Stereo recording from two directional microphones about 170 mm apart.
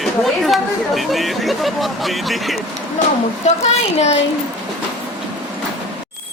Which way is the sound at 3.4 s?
40° left (ahead or behind).